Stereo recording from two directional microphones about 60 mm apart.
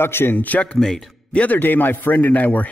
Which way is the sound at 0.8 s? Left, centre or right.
Centre.